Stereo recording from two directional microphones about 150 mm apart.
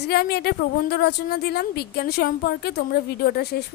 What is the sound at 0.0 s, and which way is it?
A woman's voice, 90° left.